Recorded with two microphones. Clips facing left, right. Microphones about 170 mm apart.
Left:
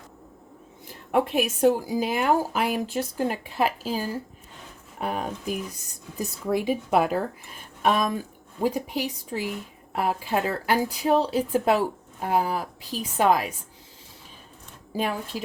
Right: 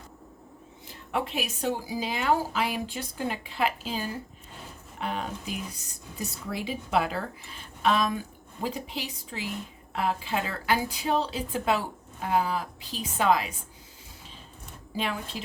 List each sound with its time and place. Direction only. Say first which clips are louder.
1.1 s a woman's voice: left 8 dB; 55° left (ahead or behind)
14.9 s a woman's voice: left 4 dB; 45° left (ahead or behind)